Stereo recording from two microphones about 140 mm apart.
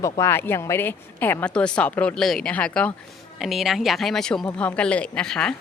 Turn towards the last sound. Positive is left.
turn(degrees=5)  # may be behind; listen again after turning